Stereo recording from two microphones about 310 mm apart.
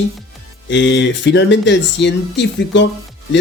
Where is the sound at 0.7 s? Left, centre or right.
Left.